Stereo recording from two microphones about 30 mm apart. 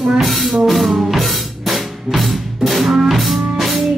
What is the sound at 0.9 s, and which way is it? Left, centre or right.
Music, centre.